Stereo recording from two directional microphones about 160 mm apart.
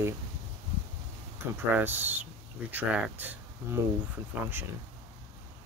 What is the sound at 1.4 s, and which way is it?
Speech, 15° right (ahead or behind).